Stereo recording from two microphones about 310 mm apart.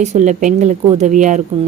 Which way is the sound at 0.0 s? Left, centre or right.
Right.